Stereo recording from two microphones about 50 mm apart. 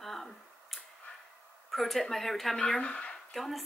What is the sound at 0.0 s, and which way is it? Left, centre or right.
Tick-tock, centre.